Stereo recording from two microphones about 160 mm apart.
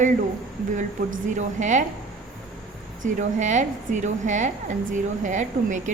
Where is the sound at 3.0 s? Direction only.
50° right (ahead or behind).